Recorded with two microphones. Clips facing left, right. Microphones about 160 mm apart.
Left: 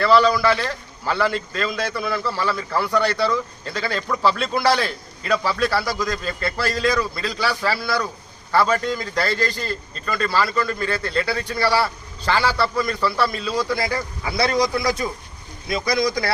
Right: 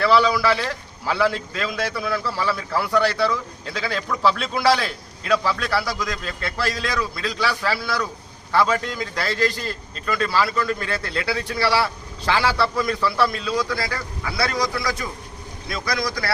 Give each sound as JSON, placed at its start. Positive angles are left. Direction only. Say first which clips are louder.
{"t": 0.0, "sound": "a man's voice", "louder": "left 2 dB", "side_deg": 0}